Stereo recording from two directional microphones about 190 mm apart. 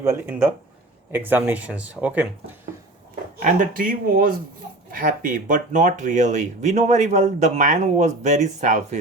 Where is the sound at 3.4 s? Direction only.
45° right (ahead or behind).